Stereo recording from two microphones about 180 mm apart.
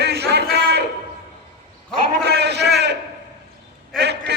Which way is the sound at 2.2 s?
65° right (ahead or behind).